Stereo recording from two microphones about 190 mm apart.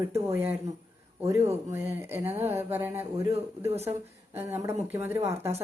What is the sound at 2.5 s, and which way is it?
Speech, 10° right (ahead or behind).